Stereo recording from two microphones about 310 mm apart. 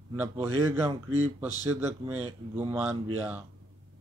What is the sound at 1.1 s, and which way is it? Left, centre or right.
Speech, right.